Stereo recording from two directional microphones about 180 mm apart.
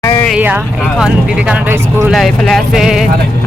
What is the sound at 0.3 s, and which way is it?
Speech, 10° right (ahead or behind).